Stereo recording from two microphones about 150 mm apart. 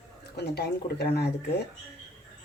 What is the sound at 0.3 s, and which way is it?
Speech, 90° left.